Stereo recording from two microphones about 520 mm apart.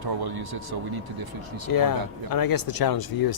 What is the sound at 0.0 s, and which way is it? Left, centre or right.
Speech, right.